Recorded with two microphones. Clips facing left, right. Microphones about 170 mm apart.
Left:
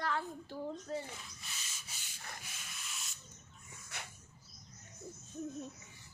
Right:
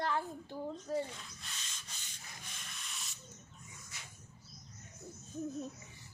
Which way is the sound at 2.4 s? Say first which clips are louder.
Even; 5° left (ahead or behind).